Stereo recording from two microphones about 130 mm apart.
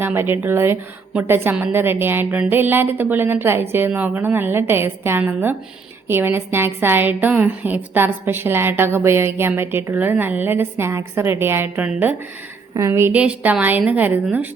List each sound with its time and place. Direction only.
0.0 s a woman's voice: 15° right (ahead or behind)